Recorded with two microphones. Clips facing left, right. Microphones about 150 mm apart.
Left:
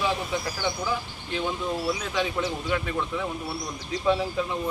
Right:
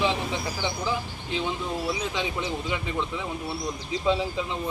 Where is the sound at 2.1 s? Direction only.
15° right (ahead or behind).